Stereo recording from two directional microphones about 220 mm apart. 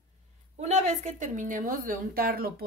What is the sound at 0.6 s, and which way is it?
A woman's voice, 30° right (ahead or behind).